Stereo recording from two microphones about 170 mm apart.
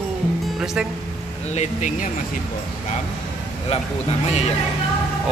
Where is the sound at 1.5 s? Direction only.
45° left (ahead or behind).